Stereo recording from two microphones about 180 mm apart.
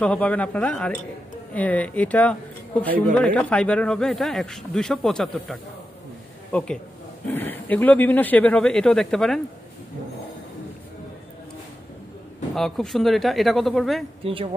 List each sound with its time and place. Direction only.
0.0 s speech: 5° left (ahead or behind)
12.5 s speech: centre (ahead or behind)
14.2 s speech: 30° right (ahead or behind)